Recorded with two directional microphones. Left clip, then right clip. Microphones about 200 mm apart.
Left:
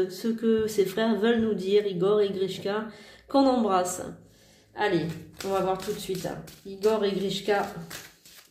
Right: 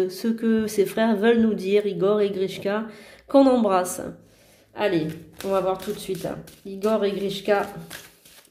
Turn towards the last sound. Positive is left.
turn(degrees=-40)  # may be behind; listen again after turning